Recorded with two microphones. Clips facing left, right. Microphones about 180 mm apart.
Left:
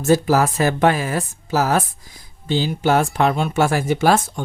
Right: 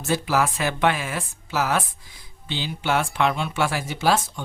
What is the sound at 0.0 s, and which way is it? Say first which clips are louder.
Speech: left 7 dB; 40° left (ahead or behind).